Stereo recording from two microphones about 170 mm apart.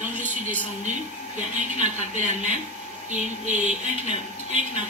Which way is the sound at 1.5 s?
45° right (ahead or behind).